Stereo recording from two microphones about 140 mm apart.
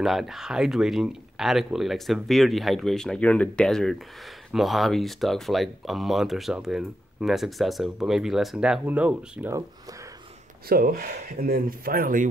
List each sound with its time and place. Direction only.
0.0 s speech: centre (ahead or behind)
10.7 s speech: 90° right